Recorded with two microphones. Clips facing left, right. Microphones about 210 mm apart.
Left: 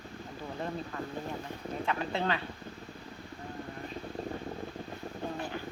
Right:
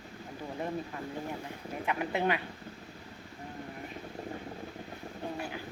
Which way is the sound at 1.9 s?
15° right (ahead or behind).